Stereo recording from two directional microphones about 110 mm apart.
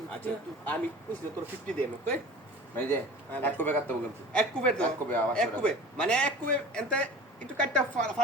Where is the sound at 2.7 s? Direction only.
15° left (ahead or behind).